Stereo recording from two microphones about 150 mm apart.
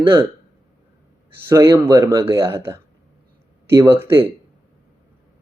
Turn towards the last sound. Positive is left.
turn(degrees=-15)  # may be behind; listen again after turning